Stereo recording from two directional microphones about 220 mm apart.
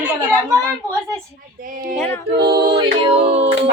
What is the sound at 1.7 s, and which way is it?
Speech, 40° right (ahead or behind).